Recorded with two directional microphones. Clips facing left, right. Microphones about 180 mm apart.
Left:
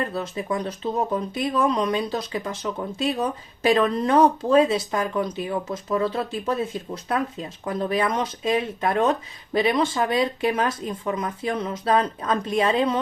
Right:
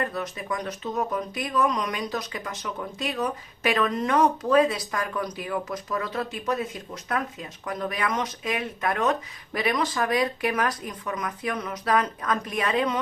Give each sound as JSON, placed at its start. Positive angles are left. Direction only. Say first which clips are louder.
{"t": 0.1, "sound": "speech", "louder": "left 4 dB", "side_deg": 30}